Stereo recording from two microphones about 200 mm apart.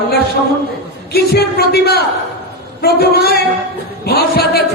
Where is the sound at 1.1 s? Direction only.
50° left (ahead or behind).